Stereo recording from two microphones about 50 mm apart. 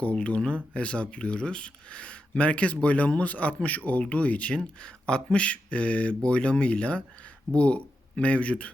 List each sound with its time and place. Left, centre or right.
0.0 s speech: left